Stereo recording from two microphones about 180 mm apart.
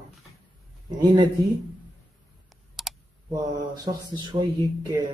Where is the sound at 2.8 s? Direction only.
Centre (ahead or behind).